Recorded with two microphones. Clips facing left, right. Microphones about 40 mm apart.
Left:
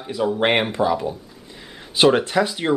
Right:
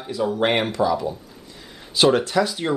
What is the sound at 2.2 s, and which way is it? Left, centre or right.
Speech, left.